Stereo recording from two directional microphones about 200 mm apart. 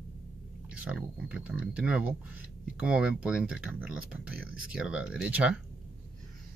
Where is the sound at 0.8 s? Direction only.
5° right (ahead or behind).